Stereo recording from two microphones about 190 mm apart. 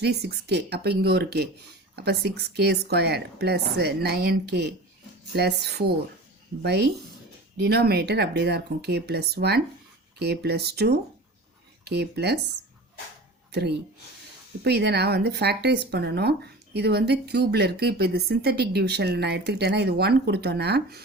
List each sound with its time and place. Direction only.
0.0 s speech: 60° right (ahead or behind)
13.5 s speech: 60° right (ahead or behind)